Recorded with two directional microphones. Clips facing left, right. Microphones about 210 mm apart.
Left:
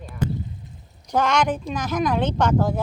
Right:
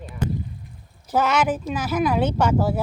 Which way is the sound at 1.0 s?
5° right (ahead or behind).